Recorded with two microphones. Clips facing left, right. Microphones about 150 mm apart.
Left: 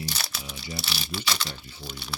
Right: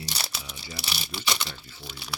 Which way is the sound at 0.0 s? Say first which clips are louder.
Left 2 dB; 20° right (ahead or behind).